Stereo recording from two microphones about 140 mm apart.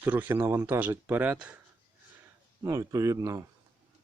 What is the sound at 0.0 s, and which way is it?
Speech, 15° right (ahead or behind).